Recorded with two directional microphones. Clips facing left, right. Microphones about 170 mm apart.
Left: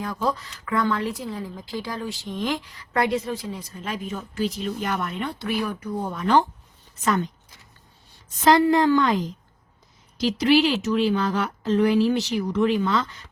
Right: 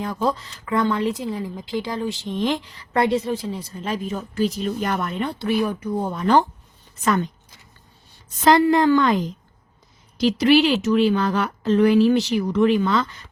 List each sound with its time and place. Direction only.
0.0 s speech: 25° right (ahead or behind)
8.4 s a woman's voice: 70° right (ahead or behind)
10.2 s speech: 60° right (ahead or behind)